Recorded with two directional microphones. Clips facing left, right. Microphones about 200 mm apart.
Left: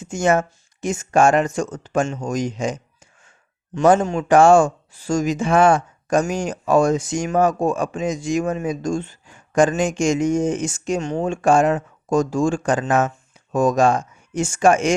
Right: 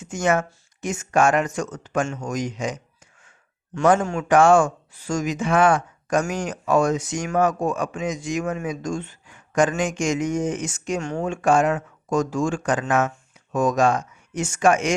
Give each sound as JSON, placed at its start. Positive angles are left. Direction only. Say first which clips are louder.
{"t": 0.0, "sound": "speech", "louder": "left 3 dB", "side_deg": 25}
{"t": 4.2, "sound": "speech", "louder": "left 3 dB", "side_deg": 30}